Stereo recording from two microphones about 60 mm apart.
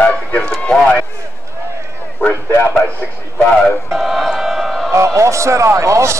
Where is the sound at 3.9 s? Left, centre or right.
Centre.